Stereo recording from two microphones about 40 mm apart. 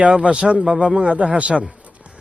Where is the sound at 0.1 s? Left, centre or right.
Right.